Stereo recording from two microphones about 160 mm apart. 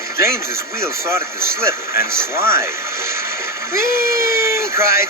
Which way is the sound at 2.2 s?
15° right (ahead or behind).